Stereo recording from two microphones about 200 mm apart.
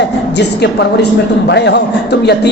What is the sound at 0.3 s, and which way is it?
A man's voice, 60° left (ahead or behind).